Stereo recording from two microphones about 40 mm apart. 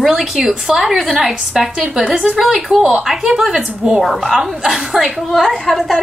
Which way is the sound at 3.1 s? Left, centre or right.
Centre.